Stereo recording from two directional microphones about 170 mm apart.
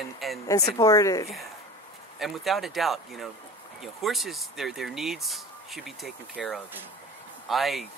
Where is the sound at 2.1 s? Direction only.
Centre (ahead or behind).